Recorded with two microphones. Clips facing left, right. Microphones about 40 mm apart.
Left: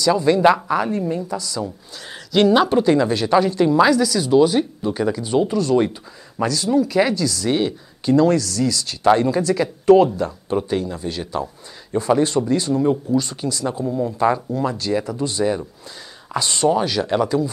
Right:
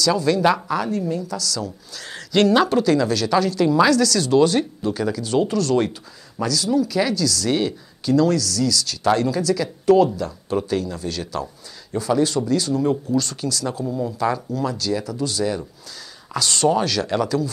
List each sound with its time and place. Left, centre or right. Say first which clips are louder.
0.0 s speech: left 3 dB; left
6.4 s speech: left 2 dB; left
12.8 s speech: left 2 dB; centre
13.8 s speech: left 4 dB; centre
14.1 s speech: left 4 dB; left